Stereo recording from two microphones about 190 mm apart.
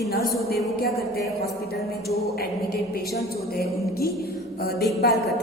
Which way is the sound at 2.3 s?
55° left (ahead or behind).